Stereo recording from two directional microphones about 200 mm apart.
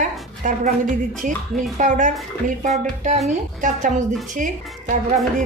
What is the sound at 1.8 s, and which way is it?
Speech, 40° right (ahead or behind).